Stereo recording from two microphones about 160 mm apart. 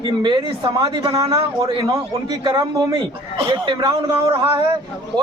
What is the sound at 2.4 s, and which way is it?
Speech, 25° right (ahead or behind).